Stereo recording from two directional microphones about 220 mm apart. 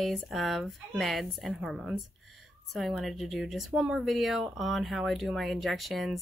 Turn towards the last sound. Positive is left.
turn(degrees=0)  # may be behind; listen again after turning